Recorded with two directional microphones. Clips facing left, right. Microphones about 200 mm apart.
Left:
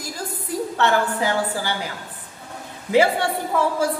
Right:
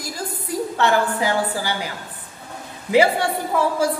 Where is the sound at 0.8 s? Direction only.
10° right (ahead or behind).